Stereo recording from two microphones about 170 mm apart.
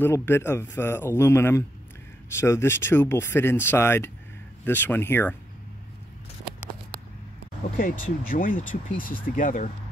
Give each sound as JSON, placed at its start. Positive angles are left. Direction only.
{"t": 0.0, "sound": "speech", "side_deg": 15}
{"t": 8.3, "sound": "speech", "side_deg": 55}